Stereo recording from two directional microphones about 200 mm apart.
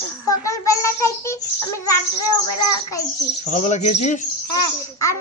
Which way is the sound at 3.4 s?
35° left (ahead or behind).